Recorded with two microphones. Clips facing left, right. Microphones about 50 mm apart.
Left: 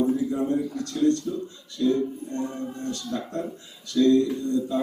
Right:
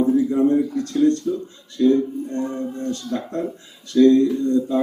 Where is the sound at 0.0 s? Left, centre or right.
Right.